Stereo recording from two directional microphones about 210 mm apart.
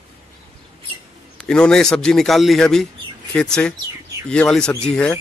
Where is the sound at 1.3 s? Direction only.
5° left (ahead or behind).